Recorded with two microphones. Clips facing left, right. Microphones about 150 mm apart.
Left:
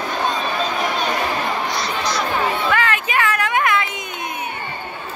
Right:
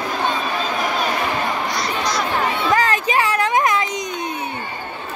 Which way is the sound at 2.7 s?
35° right (ahead or behind).